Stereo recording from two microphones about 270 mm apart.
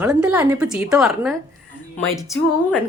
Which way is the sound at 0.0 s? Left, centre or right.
Centre.